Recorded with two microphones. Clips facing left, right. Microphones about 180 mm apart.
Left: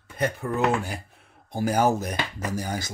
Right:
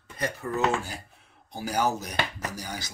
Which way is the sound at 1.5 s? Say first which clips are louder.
Left 5 dB; 50° left (ahead or behind).